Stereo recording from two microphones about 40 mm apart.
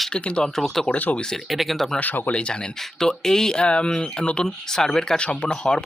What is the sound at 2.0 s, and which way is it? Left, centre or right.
Speech, left.